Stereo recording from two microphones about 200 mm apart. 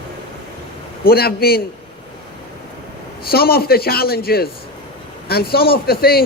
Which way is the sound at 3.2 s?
50° left (ahead or behind).